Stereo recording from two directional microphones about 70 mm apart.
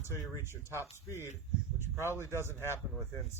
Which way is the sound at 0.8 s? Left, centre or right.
Left.